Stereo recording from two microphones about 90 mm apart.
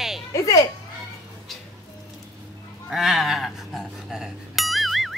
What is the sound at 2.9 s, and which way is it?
Speech, centre (ahead or behind).